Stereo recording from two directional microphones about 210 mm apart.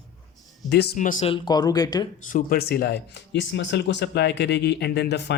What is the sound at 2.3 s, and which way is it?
Speech, 45° left (ahead or behind).